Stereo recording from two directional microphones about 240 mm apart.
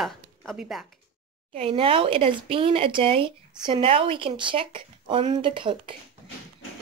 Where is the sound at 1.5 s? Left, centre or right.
Right.